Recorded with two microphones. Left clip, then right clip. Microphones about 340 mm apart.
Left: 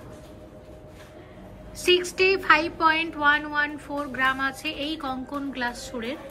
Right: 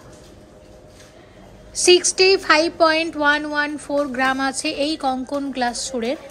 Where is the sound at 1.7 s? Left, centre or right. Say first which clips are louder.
Right 7 dB; centre.